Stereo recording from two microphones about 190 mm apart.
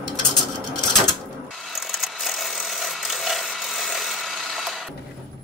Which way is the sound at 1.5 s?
Centre (ahead or behind).